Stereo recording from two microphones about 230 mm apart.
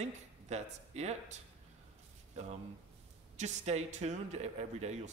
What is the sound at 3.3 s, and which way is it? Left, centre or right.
A man's voice, right.